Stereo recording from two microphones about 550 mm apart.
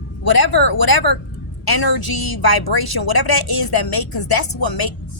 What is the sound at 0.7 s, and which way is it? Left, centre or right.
A woman's voice, left.